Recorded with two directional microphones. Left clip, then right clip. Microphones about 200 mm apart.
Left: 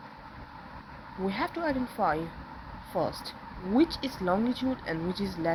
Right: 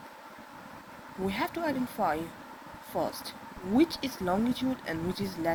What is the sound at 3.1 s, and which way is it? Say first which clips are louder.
Speech: left 1 dB; 45° right (ahead or behind).